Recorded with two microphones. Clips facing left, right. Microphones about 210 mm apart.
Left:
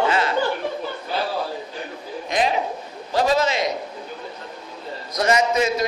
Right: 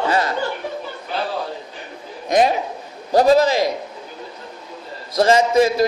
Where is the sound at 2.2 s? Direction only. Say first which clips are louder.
Right 6 dB; 45° right (ahead or behind).